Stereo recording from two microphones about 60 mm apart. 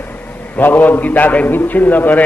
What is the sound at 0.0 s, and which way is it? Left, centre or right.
A man's voice, left.